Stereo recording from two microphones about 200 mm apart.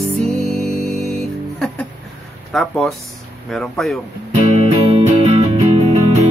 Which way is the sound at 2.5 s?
Centre (ahead or behind).